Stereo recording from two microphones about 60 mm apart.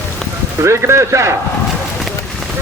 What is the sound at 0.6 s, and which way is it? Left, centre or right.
Speech, right.